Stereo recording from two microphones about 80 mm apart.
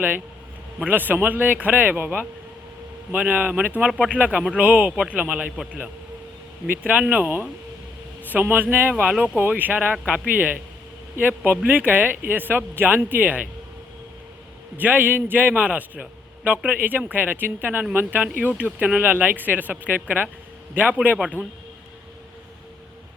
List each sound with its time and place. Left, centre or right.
0.9 s a man's voice: right
6.7 s a man's voice: centre
9.4 s a man's voice: right
14.8 s a man's voice: right
21.4 s a man's voice: left